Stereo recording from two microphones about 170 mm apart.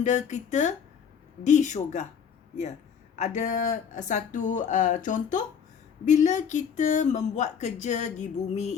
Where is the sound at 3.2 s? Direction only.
45° left (ahead or behind).